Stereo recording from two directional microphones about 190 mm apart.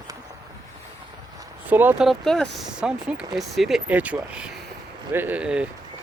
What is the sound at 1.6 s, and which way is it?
Speech, 10° right (ahead or behind).